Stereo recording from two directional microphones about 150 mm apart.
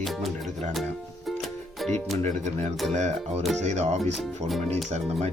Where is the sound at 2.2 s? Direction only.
50° right (ahead or behind).